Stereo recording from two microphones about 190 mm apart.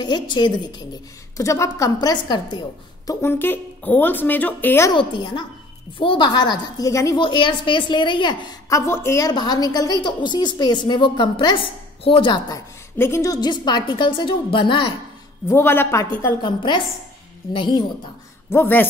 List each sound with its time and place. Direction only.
0.0 s a woman's voice: 25° left (ahead or behind)
4.9 s a woman's voice: 25° left (ahead or behind)
15.4 s speech: 15° left (ahead or behind)
16.4 s a woman's voice: 25° left (ahead or behind)
18.5 s speech: 10° left (ahead or behind)